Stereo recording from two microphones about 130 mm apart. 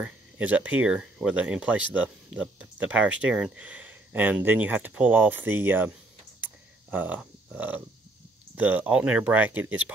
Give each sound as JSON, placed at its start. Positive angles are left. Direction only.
{"t": 0.0, "sound": "speech", "side_deg": -10}
{"t": 6.4, "sound": "a sound", "side_deg": -10}
{"t": 8.5, "sound": "speech", "side_deg": -15}